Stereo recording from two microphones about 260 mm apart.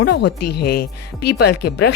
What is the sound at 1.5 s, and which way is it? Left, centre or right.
Speech, left.